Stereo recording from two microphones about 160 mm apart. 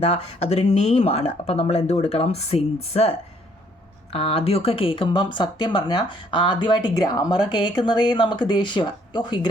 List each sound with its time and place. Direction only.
0.0 s speech: 40° left (ahead or behind)